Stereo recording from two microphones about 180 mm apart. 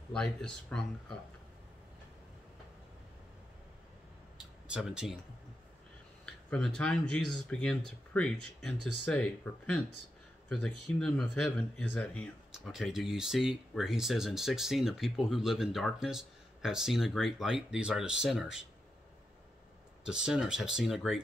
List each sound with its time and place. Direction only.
0.1 s speech: 5° left (ahead or behind)
4.6 s speech: 5° right (ahead or behind)
6.2 s speech: 5° left (ahead or behind)
20.1 s speech: 5° right (ahead or behind)